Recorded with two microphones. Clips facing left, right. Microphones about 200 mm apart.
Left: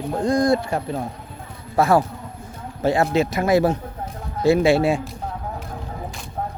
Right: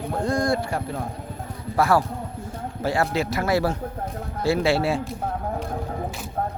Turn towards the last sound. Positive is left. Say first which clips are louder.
# left 4 dB
turn(degrees=15)  # may be behind; listen again after turning